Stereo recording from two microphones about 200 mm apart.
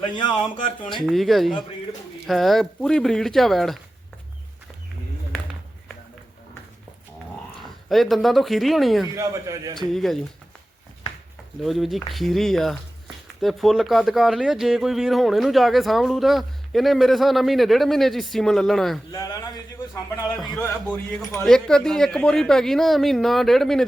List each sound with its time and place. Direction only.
0.2 s speech: 25° left (ahead or behind)
1.0 s speech: centre (ahead or behind)
7.6 s speech: centre (ahead or behind)
9.1 s a man's voice: 15° right (ahead or behind)
9.7 s speech: centre (ahead or behind)
11.6 s speech: centre (ahead or behind)
19.1 s speech: 20° left (ahead or behind); by 23.8 s centre (ahead or behind)